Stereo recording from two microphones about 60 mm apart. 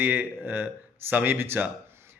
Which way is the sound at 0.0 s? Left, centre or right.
Right.